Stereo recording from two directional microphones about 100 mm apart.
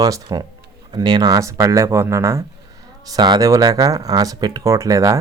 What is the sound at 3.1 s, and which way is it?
Speech, 45° right (ahead or behind).